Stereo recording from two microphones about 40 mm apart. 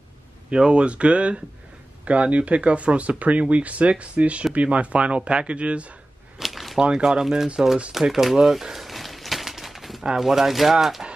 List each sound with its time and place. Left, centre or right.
0.5 s speech: right
6.3 s squish: centre
6.8 s speech: centre
7.9 s a sound: centre
10.1 s speech: centre